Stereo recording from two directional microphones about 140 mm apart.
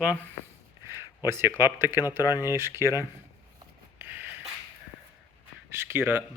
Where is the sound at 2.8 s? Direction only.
25° left (ahead or behind).